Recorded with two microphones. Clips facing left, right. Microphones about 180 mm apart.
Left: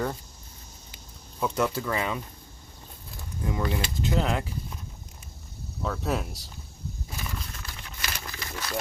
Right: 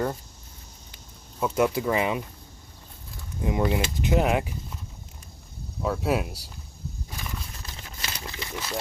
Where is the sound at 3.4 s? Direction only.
20° right (ahead or behind).